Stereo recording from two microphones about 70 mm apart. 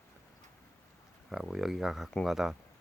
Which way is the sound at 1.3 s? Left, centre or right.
Centre.